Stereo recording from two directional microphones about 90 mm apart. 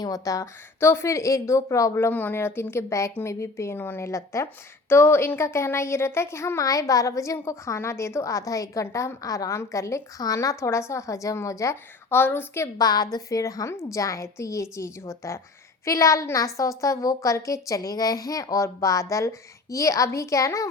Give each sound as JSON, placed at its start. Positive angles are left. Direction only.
{"t": 0.0, "sound": "speech", "side_deg": 40}
{"t": 0.8, "sound": "a woman's voice", "side_deg": 30}
{"t": 12.8, "sound": "speech", "side_deg": 45}